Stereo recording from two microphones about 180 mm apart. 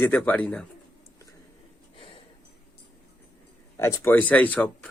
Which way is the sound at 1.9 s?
30° left (ahead or behind).